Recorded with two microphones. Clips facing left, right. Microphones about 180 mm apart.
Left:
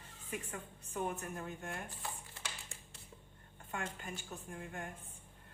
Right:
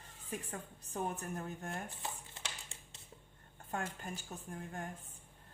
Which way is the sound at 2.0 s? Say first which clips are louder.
Right 1 dB; 20° right (ahead or behind).